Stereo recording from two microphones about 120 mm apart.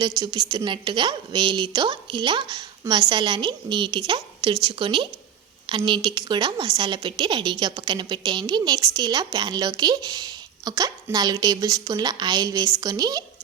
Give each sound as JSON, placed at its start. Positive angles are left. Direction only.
{"t": 0.0, "sound": "a woman's voice", "side_deg": -35}